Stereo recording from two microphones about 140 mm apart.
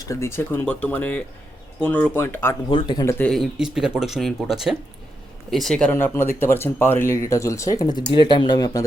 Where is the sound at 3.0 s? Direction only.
15° left (ahead or behind).